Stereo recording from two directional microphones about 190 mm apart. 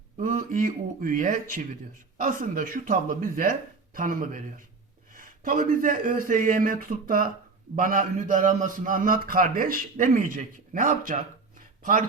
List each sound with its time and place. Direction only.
0.2 s a man's voice: 40° right (ahead or behind)